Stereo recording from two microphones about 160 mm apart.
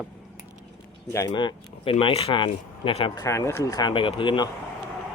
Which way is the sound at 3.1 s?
20° left (ahead or behind).